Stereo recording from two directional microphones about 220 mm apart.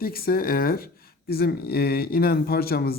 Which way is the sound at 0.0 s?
40° left (ahead or behind).